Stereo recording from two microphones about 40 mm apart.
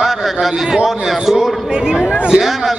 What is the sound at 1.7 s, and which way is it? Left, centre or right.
Speech, right.